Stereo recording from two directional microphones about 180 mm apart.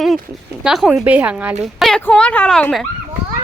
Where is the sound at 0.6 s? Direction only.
Centre (ahead or behind).